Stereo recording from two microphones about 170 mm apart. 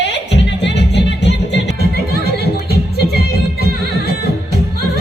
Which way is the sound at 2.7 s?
70° left (ahead or behind).